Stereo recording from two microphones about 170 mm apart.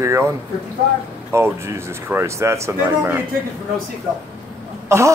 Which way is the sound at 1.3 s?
15° right (ahead or behind).